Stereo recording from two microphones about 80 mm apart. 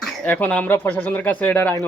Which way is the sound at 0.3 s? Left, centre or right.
Left.